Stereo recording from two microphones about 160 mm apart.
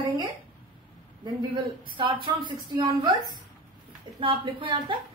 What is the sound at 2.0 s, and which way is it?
A woman's voice, 30° right (ahead or behind).